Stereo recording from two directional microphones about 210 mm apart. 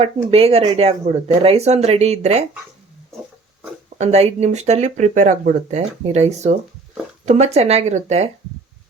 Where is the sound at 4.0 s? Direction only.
30° right (ahead or behind).